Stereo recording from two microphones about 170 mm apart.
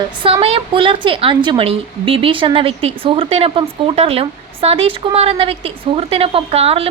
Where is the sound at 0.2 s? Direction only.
30° right (ahead or behind).